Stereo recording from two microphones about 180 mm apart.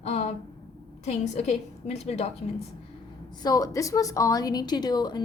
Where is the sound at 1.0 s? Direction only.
40° left (ahead or behind).